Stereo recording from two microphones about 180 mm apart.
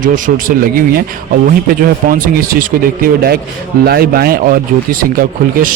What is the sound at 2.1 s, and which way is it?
A man's voice, 50° right (ahead or behind).